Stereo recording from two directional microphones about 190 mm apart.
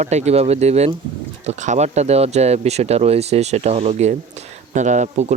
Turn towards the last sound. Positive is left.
turn(degrees=-40)  # may be behind; listen again after turning